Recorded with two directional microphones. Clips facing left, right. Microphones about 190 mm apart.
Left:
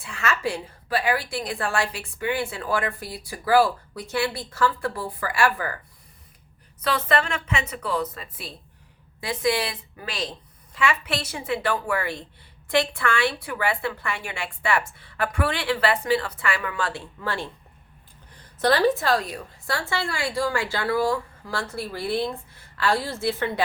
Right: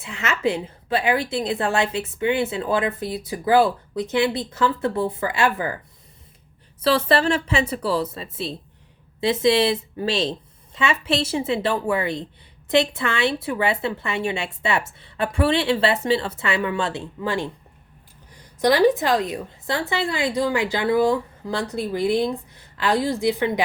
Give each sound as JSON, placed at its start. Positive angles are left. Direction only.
{"t": 0.0, "sound": "a woman's voice", "side_deg": -20}
{"t": 6.8, "sound": "a woman's voice", "side_deg": -30}
{"t": 18.6, "sound": "a woman's voice", "side_deg": -15}